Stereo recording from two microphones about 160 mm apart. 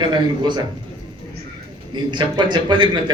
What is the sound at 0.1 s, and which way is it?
Speech, 25° right (ahead or behind).